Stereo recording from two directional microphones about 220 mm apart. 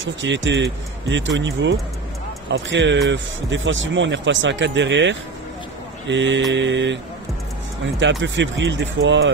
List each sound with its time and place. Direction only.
0.0 s speech: 55° right (ahead or behind)
8.0 s speech: 55° right (ahead or behind)